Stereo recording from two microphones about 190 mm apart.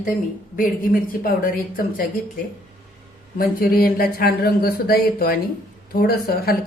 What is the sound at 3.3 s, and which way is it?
Speech, 50° left (ahead or behind).